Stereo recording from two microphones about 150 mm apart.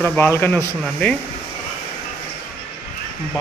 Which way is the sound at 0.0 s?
15° left (ahead or behind).